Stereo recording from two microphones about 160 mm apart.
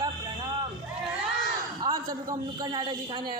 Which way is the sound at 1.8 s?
25° right (ahead or behind).